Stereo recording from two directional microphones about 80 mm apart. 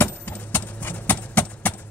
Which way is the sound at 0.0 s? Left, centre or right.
Left.